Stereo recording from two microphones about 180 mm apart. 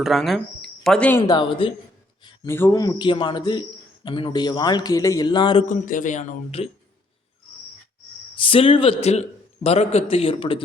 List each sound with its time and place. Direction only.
0.0 s speech: centre (ahead or behind)
1.3 s a man's voice: 25° left (ahead or behind)
2.5 s a man's voice: 15° left (ahead or behind)
5.6 s speech: 45° left (ahead or behind)
8.4 s a man's voice: 30° left (ahead or behind)